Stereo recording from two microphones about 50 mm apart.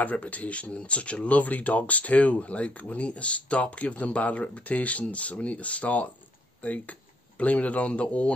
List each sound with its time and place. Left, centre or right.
0.0 s speech: left